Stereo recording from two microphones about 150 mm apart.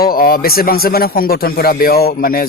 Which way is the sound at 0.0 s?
85° left.